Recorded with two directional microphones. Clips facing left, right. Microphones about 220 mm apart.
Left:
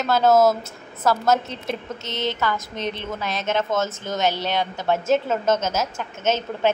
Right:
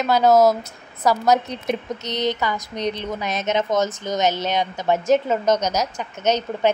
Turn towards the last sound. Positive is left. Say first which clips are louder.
# right 2 dB
turn(degrees=-15)  # may be behind; listen again after turning